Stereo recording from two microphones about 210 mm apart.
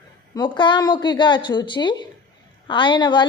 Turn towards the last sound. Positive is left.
turn(degrees=20)  # may be behind; listen again after turning